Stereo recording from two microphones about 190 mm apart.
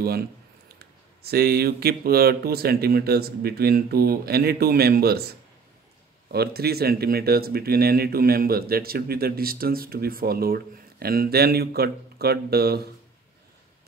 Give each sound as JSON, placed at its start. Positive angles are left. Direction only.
{"t": 0.7, "sound": "speech", "side_deg": -55}
{"t": 6.3, "sound": "speech", "side_deg": -55}